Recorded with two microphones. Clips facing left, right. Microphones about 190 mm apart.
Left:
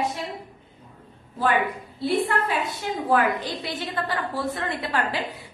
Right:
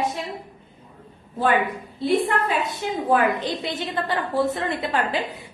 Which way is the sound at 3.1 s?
20° right (ahead or behind).